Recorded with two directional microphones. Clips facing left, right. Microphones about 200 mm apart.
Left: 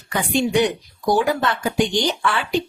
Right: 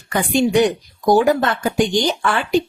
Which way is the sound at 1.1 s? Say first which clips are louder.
Right 4 dB; 45° right (ahead or behind).